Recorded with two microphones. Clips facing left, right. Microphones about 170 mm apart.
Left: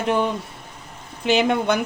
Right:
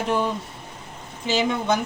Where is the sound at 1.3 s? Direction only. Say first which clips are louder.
Left 3 dB; 60° left (ahead or behind).